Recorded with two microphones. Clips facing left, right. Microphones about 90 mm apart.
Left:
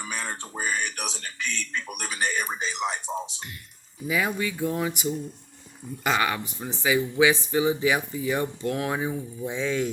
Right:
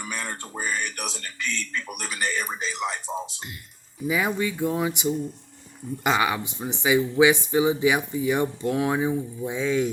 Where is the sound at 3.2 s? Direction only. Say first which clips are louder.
Even; 20° right (ahead or behind).